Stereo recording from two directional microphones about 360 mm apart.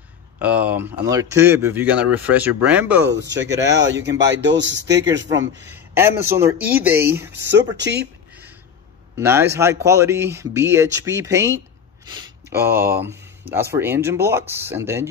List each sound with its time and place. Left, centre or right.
0.4 s speech: centre
3.1 s a man's voice: right
6.3 s speech: centre
7.8 s a man's voice: right
9.1 s speech: centre